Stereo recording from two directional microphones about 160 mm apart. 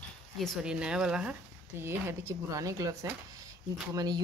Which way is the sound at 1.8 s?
15° right (ahead or behind).